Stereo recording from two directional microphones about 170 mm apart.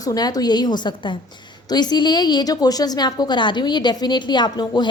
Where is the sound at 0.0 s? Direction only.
20° left (ahead or behind).